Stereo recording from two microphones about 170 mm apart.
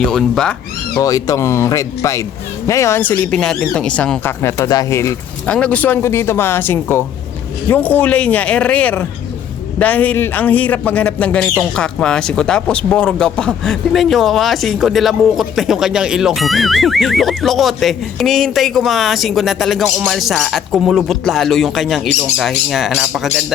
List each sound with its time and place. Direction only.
0.0 s speech: 5° left (ahead or behind)
0.9 s speech: 20° left (ahead or behind); by 23.4 s centre (ahead or behind)